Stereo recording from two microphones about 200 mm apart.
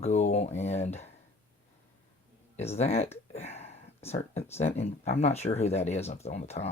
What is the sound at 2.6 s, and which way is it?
Speech, 30° left (ahead or behind).